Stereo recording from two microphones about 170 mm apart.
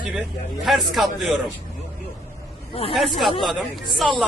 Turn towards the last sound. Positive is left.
turn(degrees=0)  # may be behind; listen again after turning